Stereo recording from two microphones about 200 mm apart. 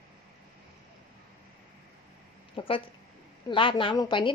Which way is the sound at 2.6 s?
25° left (ahead or behind).